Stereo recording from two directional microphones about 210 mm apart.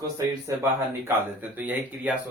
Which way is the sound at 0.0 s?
15° right (ahead or behind).